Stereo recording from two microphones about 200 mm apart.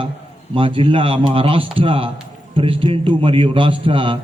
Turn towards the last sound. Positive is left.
turn(degrees=-25)  # may be behind; listen again after turning